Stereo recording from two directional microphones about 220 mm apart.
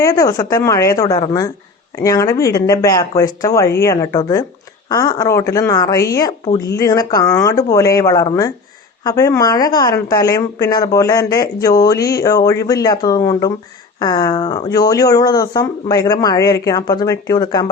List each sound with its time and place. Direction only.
0.0 s a woman's voice: 15° left (ahead or behind)